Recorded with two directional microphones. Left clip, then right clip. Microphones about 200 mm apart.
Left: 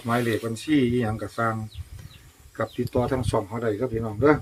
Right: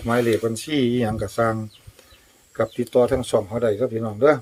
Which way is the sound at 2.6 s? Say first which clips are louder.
Right 7 dB; 45° right (ahead or behind).